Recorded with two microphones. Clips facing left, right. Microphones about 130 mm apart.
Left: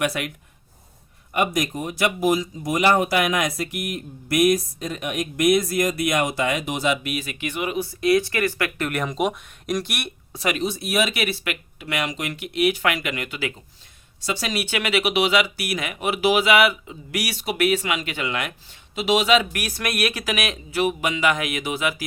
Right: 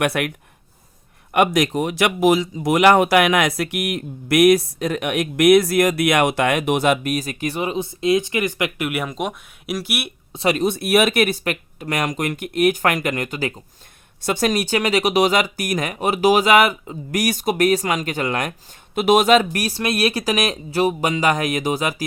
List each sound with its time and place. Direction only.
0.0 s speech: 60° right (ahead or behind); by 8.9 s 20° right (ahead or behind)
8.9 s speech: 5° right (ahead or behind)
10.3 s speech: 30° right (ahead or behind)
10.6 s speech: 55° right (ahead or behind); by 22.0 s 40° right (ahead or behind)